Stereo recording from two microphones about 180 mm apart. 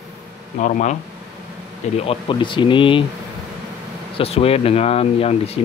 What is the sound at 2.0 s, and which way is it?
Speech, 25° left (ahead or behind).